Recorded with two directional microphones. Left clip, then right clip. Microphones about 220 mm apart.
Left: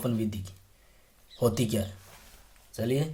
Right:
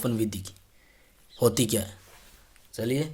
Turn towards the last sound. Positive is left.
turn(degrees=-20)  # may be behind; listen again after turning